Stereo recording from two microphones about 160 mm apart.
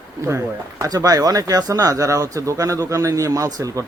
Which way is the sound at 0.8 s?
20° right (ahead or behind).